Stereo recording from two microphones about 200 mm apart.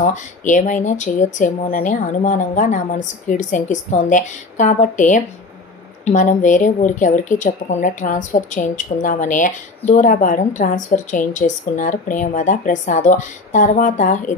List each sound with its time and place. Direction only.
0.0 s a woman's voice: 40° left (ahead or behind)